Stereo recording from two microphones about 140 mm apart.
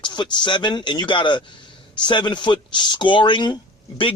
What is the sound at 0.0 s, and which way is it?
Speech, 35° left (ahead or behind).